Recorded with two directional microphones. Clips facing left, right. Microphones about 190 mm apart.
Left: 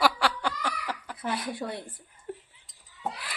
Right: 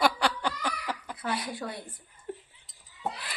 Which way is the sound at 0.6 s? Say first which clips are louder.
Even; 15° right (ahead or behind).